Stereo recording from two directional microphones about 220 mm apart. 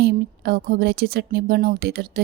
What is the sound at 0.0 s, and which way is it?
Speech, 45° right (ahead or behind).